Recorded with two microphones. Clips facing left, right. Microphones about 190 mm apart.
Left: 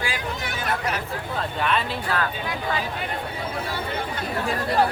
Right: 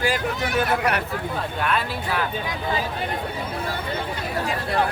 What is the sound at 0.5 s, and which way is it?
Speech, 65° right (ahead or behind).